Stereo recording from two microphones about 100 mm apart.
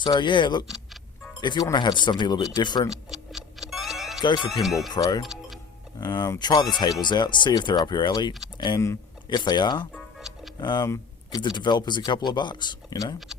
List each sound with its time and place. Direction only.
0.0 s speech: 50° left (ahead or behind)
2.9 s music: 5° right (ahead or behind)
4.6 s speech: centre (ahead or behind)
4.9 s speech: 40° left (ahead or behind)
5.2 s music: centre (ahead or behind)
6.0 s speech: 40° left (ahead or behind)
10.2 s music: 5° right (ahead or behind)
10.6 s speech: 50° left (ahead or behind)
10.8 s a sound: 35° left (ahead or behind)
11.3 s speech: 50° left (ahead or behind)